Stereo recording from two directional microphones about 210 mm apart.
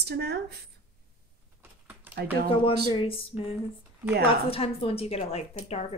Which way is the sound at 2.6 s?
25° left (ahead or behind).